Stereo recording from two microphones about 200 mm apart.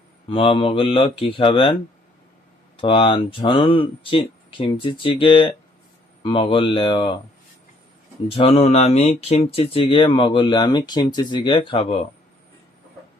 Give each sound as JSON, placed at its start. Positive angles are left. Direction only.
{"t": 0.3, "sound": "speech", "side_deg": 30}
{"t": 2.7, "sound": "speech", "side_deg": 25}
{"t": 8.3, "sound": "speech", "side_deg": 30}